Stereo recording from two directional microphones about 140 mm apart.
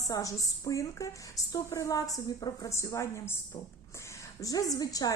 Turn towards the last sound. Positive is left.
turn(degrees=25)  # may be behind; listen again after turning